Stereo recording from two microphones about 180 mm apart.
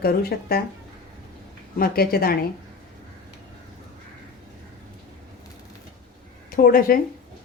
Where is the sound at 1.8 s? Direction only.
55° left (ahead or behind).